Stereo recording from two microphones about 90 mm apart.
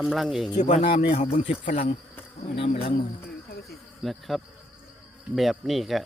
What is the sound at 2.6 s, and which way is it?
Speech, 90° left.